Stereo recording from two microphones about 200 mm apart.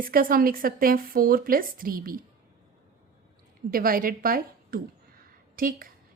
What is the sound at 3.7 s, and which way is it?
A woman's voice, 45° right (ahead or behind).